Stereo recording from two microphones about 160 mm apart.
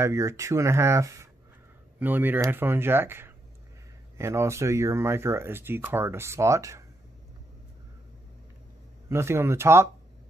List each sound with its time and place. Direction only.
0.0 s speech: 20° right (ahead or behind)
9.1 s speech: 15° right (ahead or behind)